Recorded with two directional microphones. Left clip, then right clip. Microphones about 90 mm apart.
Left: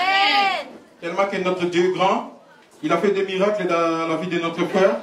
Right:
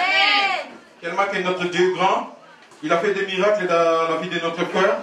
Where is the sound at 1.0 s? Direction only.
35° right (ahead or behind).